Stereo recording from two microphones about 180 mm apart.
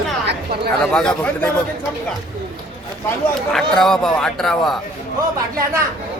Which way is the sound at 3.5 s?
Centre (ahead or behind).